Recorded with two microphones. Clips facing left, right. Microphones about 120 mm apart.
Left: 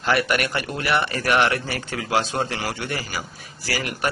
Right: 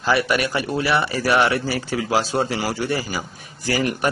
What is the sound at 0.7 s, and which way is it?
Speech, 10° right (ahead or behind).